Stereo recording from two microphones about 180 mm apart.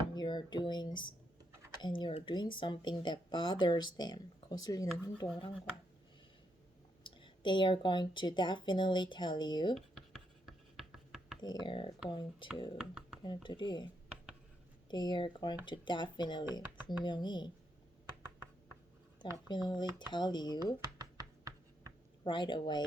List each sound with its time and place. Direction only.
0.1 s speech: 25° left (ahead or behind)
7.0 s speech: 25° left (ahead or behind)
9.7 s writing: centre (ahead or behind)
11.3 s speech: 25° left (ahead or behind)
12.7 s speech: 5° right (ahead or behind)
13.2 s speech: 25° left (ahead or behind)
14.8 s speech: 25° left (ahead or behind)
19.5 s speech: 25° left (ahead or behind)
21.0 s a sound: 20° right (ahead or behind)
22.2 s speech: 25° left (ahead or behind)